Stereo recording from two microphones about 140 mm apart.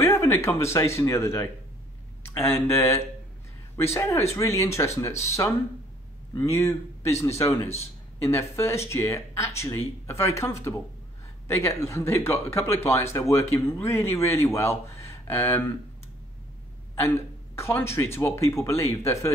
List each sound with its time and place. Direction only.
0.0 s speech: 20° left (ahead or behind)
17.6 s speech: 20° left (ahead or behind)